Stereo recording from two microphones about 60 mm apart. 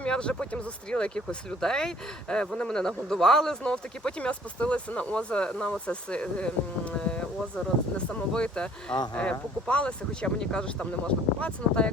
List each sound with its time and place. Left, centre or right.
0.0 s speech: centre